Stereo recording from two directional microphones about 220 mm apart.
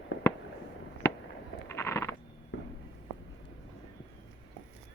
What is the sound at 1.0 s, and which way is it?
Fireworks, 15° left (ahead or behind).